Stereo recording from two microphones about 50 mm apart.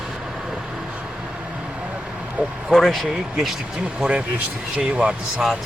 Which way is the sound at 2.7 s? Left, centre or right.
Centre.